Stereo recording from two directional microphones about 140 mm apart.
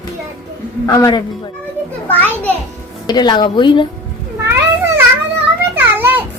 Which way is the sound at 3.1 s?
30° left (ahead or behind).